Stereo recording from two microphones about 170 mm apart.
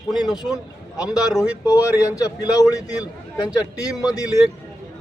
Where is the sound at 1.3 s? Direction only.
5° right (ahead or behind).